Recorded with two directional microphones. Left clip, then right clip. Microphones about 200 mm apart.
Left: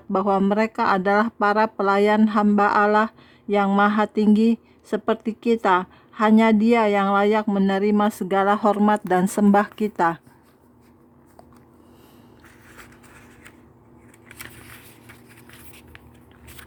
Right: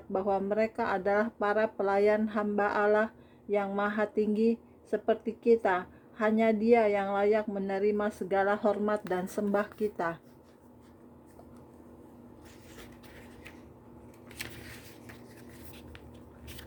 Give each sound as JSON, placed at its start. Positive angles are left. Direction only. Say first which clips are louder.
{"t": 0.1, "sound": "speech", "louder": "left 9 dB", "side_deg": 35}